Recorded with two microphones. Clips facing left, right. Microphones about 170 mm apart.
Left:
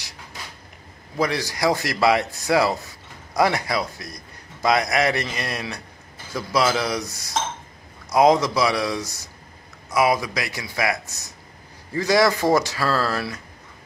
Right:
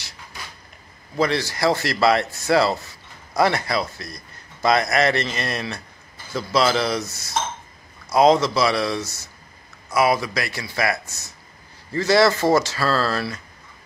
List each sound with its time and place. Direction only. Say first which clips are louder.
1.1 s a man's voice: right 2 dB; 15° left (ahead or behind)